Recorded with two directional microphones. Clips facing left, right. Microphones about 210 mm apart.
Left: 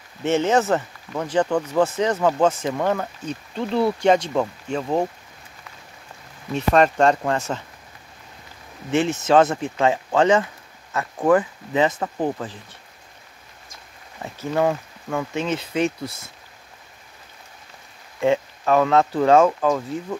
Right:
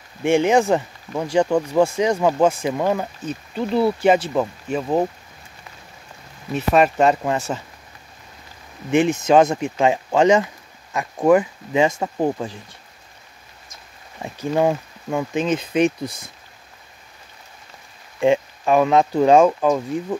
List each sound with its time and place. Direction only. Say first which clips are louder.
0.2 s speech: right 3 dB; 10° right (ahead or behind)
6.5 s speech: right 1 dB; 10° right (ahead or behind)
8.9 s speech: right 2 dB; 15° right (ahead or behind)
14.2 s speech: right 2 dB; 15° right (ahead or behind)
18.2 s speech: right 2 dB; 15° right (ahead or behind)